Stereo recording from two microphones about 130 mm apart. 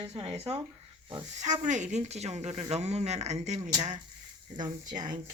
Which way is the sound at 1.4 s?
70° right (ahead or behind).